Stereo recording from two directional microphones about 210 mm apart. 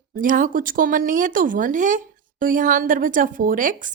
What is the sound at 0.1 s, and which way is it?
A woman's voice, 40° right (ahead or behind).